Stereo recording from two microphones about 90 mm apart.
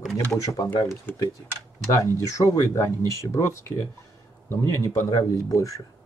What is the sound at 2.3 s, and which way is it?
Speech, 35° left (ahead or behind).